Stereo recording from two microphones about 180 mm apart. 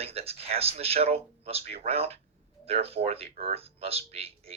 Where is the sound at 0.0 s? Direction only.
35° right (ahead or behind).